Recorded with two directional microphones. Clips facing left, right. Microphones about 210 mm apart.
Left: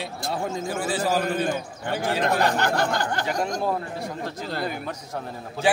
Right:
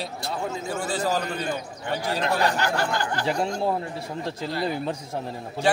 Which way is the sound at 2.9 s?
40° left (ahead or behind).